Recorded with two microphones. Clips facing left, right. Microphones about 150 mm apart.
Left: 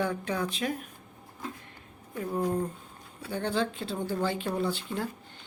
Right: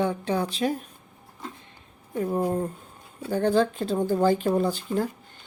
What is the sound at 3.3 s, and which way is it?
Speech, 45° right (ahead or behind).